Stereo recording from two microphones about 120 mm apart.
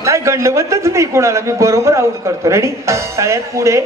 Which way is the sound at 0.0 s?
25° right (ahead or behind).